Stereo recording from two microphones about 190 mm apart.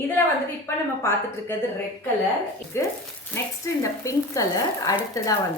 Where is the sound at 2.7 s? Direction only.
15° left (ahead or behind).